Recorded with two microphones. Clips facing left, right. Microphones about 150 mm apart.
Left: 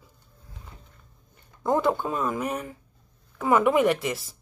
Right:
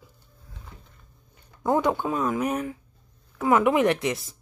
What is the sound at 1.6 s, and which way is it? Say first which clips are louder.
A woman's voice: right 1 dB; 15° right (ahead or behind).